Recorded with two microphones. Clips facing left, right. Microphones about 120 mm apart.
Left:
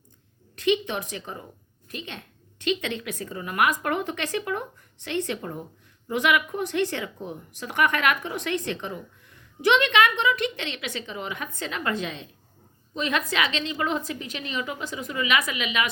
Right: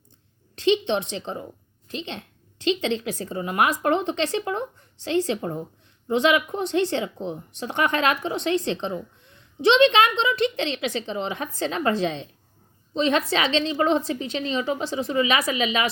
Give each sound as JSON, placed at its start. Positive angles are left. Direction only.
{"t": 0.5, "sound": "a woman's voice", "side_deg": -30}